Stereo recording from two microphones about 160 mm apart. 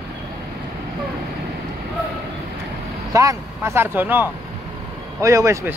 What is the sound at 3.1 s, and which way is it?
Speech, 20° right (ahead or behind).